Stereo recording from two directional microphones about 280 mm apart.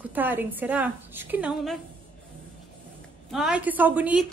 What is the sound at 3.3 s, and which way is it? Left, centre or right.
Speech, centre.